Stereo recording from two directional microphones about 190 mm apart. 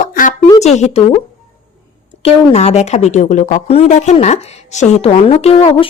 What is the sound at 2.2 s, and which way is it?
Speech, 35° left (ahead or behind).